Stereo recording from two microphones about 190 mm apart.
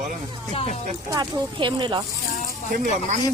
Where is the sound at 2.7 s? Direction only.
40° right (ahead or behind).